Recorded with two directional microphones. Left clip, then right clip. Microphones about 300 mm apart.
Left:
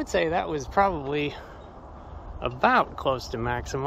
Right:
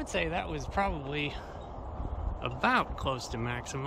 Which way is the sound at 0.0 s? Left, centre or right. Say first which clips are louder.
Left 8 dB; centre.